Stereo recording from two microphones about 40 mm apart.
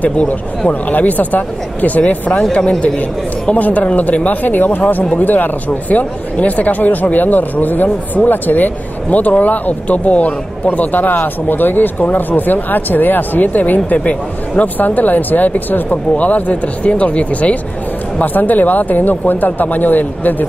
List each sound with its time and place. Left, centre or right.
0.0 s speech: left
3.5 s speech: left
13.8 s speech: left
18.2 s speech: left